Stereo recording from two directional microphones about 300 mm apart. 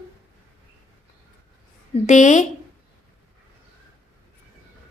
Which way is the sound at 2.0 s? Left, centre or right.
Left.